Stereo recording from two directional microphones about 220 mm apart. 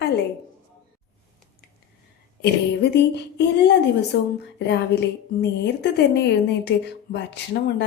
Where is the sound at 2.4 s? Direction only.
50° left (ahead or behind).